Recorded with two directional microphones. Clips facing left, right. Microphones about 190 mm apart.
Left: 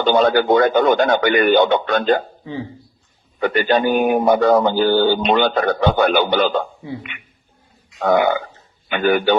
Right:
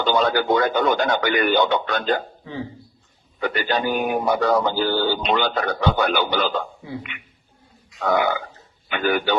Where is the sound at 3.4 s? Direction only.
55° left (ahead or behind).